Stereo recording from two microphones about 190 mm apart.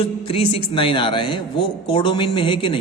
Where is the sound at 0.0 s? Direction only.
30° left (ahead or behind).